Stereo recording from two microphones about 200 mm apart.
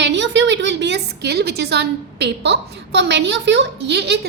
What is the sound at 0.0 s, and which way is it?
A woman's voice, 65° right (ahead or behind).